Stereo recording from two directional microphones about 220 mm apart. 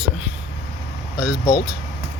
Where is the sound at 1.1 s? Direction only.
15° left (ahead or behind).